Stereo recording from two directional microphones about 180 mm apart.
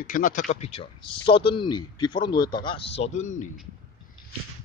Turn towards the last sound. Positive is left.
turn(degrees=45)  # may be behind; listen again after turning